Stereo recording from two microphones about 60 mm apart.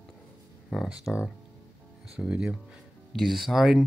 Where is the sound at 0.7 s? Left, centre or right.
Centre.